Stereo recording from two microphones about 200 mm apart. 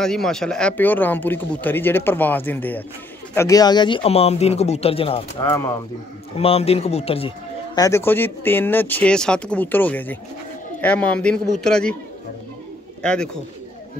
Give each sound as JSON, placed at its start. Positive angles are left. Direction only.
{"t": 0.0, "sound": "speech", "side_deg": 0}
{"t": 5.4, "sound": "speech", "side_deg": 15}
{"t": 6.3, "sound": "speech", "side_deg": 30}
{"t": 13.0, "sound": "speech", "side_deg": 5}